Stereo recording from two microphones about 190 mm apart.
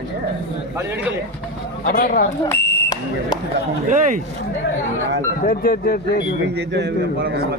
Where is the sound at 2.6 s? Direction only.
60° left (ahead or behind).